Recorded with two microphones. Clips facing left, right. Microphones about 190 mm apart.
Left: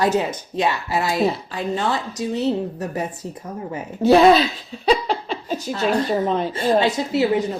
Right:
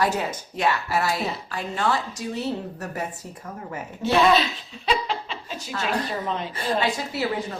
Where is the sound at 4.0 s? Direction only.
40° left (ahead or behind).